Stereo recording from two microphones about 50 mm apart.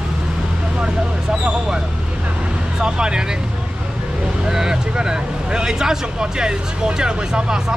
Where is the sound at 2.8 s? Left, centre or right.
Centre.